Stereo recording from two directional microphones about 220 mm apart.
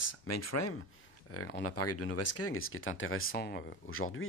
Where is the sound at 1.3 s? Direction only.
90° left; by 3.3 s 65° left (ahead or behind).